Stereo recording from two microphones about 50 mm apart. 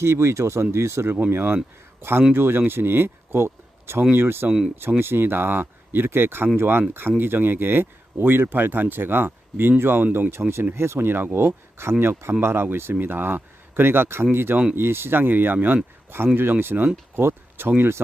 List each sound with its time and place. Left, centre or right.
0.0 s speech: right
1.3 s speech: right
10.8 s speech: right
12.9 s speech: right
17.7 s speech: right